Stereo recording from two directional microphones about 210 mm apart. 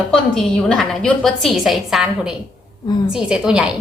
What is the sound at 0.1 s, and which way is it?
Speech, 5° left (ahead or behind).